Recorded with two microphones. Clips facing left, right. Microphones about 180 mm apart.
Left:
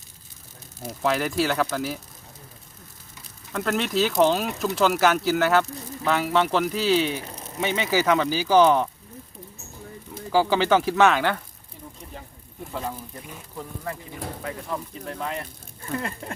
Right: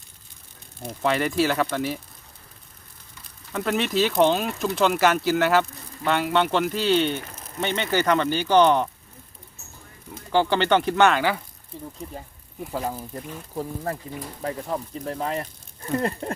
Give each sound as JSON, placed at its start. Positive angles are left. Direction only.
{"t": 0.8, "sound": "speech", "side_deg": 0}
{"t": 3.5, "sound": "speech", "side_deg": 0}
{"t": 10.3, "sound": "speech", "side_deg": 5}
{"t": 14.4, "sound": "speech", "side_deg": -35}